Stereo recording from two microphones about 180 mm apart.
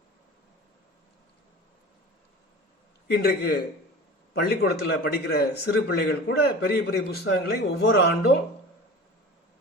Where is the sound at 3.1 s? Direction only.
60° left (ahead or behind).